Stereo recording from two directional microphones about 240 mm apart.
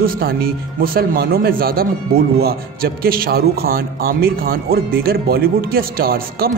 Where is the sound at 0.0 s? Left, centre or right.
Right.